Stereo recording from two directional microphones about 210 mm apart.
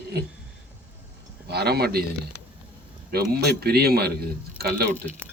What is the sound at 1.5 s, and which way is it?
Speech, 50° right (ahead or behind).